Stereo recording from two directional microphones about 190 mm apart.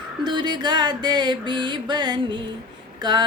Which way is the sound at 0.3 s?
25° right (ahead or behind).